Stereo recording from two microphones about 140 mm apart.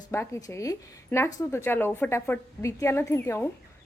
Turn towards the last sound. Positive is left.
turn(degrees=20)  # may be behind; listen again after turning